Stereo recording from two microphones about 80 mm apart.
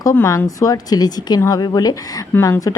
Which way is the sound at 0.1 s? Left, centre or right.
Left.